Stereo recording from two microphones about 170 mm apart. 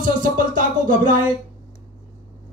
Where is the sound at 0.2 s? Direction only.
50° right (ahead or behind).